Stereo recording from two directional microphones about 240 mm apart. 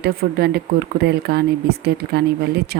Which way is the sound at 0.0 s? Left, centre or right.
Right.